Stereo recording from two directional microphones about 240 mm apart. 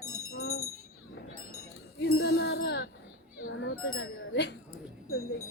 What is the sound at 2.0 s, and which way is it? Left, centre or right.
Music, left.